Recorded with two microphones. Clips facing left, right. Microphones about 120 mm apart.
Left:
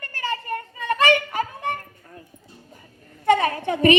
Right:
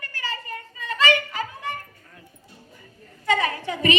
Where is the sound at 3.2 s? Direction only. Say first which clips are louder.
Left 5 dB; 55° left (ahead or behind).